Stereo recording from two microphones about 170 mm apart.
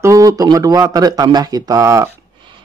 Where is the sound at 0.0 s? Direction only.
20° right (ahead or behind).